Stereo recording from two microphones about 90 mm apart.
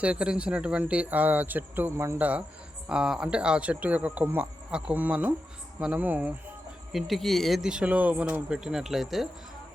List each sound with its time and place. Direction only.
0.0 s speech: 15° right (ahead or behind)
2.1 s speech: 15° right (ahead or behind)
6.9 s speech: centre (ahead or behind)